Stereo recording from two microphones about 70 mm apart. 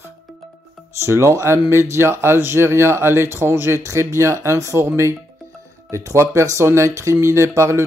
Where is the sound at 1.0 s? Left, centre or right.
Right.